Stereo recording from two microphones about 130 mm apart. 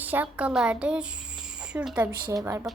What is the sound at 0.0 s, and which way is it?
Speech, 15° right (ahead or behind).